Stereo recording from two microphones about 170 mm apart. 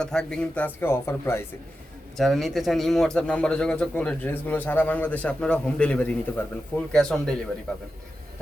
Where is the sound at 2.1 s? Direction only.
Centre (ahead or behind).